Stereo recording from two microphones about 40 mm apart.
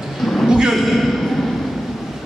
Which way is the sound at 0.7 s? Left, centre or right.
Centre.